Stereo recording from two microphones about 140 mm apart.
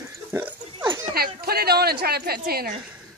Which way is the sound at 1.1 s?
90° right.